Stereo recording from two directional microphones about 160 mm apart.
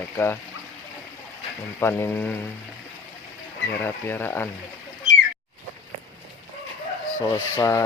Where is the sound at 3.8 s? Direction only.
15° left (ahead or behind).